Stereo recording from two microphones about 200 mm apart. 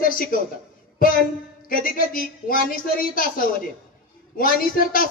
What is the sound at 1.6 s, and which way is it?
A woman's voice, 45° left (ahead or behind).